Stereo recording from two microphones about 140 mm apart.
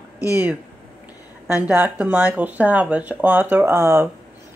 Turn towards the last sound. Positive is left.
turn(degrees=-20)  # may be behind; listen again after turning